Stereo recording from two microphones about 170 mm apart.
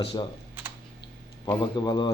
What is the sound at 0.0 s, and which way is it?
Speech, 30° left (ahead or behind).